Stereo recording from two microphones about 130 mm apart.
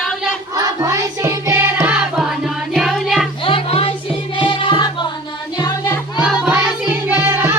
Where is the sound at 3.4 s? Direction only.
45° left (ahead or behind).